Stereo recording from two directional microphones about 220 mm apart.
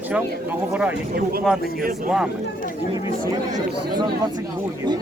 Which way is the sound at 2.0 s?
5° right (ahead or behind).